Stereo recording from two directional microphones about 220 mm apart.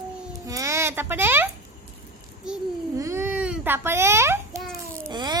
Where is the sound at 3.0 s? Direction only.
15° right (ahead or behind).